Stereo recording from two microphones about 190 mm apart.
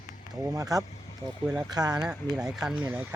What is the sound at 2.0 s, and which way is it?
Speech, 5° right (ahead or behind).